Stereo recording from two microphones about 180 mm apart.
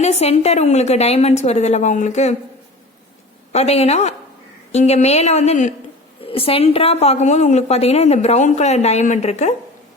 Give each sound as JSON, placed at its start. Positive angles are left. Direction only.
{"t": 0.0, "sound": "a woman's voice", "side_deg": 35}
{"t": 3.5, "sound": "a woman's voice", "side_deg": 35}